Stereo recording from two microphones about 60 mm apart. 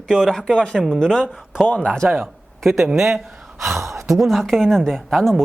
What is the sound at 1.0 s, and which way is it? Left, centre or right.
Speech, centre.